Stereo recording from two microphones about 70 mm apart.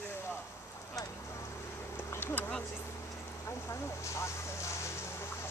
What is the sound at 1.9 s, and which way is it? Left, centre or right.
Bee, left.